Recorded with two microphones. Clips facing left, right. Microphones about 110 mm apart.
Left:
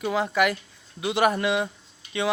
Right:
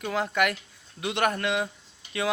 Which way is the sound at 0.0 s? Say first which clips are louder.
Left 3 dB; 5° left (ahead or behind).